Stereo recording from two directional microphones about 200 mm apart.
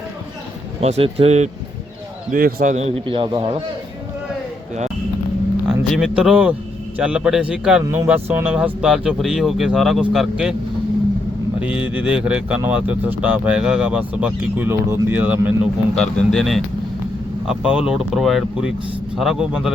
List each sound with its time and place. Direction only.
0.8 s a man's voice: 30° right (ahead or behind)
2.3 s a man's voice: 45° right (ahead or behind); by 3.6 s 25° right (ahead or behind)
5.7 s a man's voice: 5° right (ahead or behind)
11.6 s speech: 5° right (ahead or behind)
16.0 s a man's voice: 5° left (ahead or behind)